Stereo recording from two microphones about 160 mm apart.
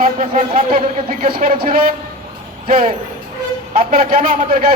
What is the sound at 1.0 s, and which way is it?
A man's voice, 65° right (ahead or behind).